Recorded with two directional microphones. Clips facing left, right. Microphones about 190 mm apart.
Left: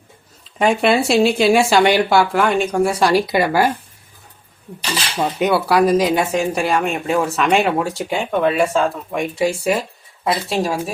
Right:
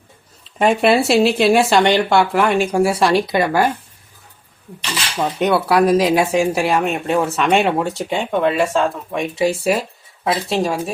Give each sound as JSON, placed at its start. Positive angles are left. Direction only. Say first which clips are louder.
{"t": 0.6, "sound": "speech", "louder": "right 1 dB", "side_deg": 0}
{"t": 5.1, "sound": "speech", "louder": "right 1 dB", "side_deg": 5}